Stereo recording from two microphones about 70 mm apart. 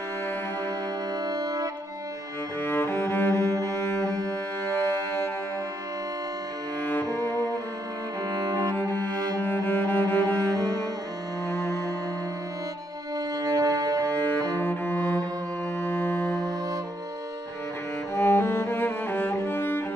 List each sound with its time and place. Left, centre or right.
1.2 s music: right
2.6 s cello: left
4.6 s music: left
6.8 s cello: left
8.5 s cello: right
8.7 s cello: left
9.4 s music: left
10.5 s cello: right
11.4 s music: left
13.4 s music: right
14.0 s cello: left
15.8 s music: left
18.1 s cello: left